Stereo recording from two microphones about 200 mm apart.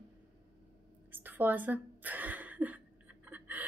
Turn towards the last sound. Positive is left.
turn(degrees=-10)  # may be behind; listen again after turning